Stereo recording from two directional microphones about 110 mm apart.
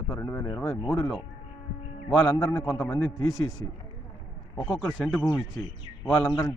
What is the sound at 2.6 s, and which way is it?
Speech, 10° left (ahead or behind).